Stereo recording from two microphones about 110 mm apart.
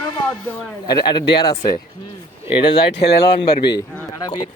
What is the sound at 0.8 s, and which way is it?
Speech, 40° left (ahead or behind).